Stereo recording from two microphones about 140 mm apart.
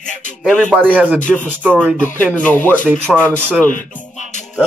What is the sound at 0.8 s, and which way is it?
Speech, 10° right (ahead or behind).